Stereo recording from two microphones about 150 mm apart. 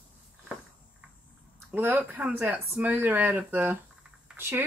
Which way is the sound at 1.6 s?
15° right (ahead or behind).